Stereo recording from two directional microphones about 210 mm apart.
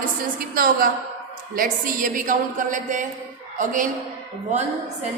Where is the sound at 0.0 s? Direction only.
45° right (ahead or behind).